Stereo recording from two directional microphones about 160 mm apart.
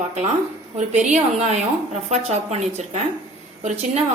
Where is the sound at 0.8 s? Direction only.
45° right (ahead or behind).